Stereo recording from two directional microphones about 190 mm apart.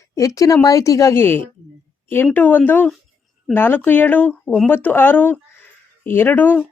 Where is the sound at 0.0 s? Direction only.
15° left (ahead or behind).